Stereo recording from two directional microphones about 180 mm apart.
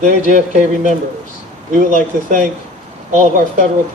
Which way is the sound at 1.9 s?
45° right (ahead or behind).